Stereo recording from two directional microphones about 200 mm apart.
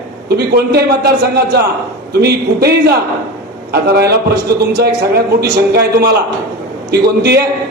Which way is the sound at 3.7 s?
50° right (ahead or behind).